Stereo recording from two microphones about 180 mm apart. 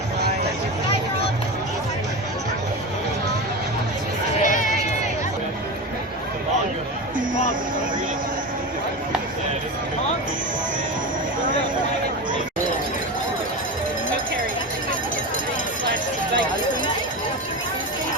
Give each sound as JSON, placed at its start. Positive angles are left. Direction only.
{"t": 4.4, "sound": "run", "side_deg": 45}